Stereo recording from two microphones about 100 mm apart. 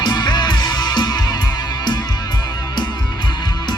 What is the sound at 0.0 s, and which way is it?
Music, 50° left (ahead or behind).